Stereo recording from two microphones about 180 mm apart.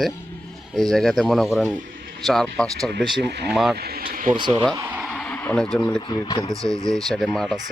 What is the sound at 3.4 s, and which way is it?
Speech, centre (ahead or behind).